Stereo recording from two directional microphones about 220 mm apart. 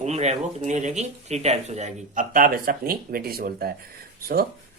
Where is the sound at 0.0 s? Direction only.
30° right (ahead or behind).